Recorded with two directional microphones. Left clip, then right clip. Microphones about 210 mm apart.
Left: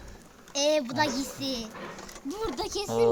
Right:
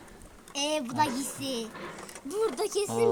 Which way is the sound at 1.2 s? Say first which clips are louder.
Left 1 dB; 10° left (ahead or behind).